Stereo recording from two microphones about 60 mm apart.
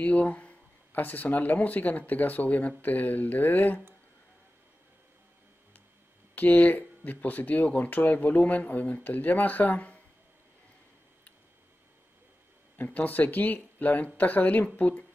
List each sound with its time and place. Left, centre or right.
0.0 s speech: left
6.3 s speech: left
12.7 s speech: left